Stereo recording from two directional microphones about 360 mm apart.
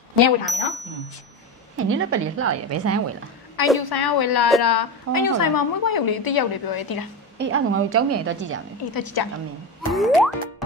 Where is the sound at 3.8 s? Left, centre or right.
Left.